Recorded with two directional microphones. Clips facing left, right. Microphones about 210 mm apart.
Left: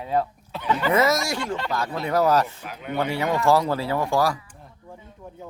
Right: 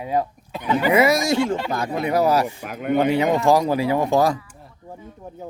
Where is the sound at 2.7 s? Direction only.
50° right (ahead or behind).